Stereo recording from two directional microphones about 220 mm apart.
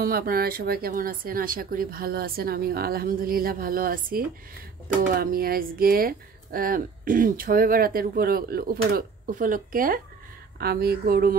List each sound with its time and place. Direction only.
0.0 s speech: 40° right (ahead or behind)